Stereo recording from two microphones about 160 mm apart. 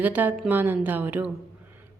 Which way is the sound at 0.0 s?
10° right (ahead or behind).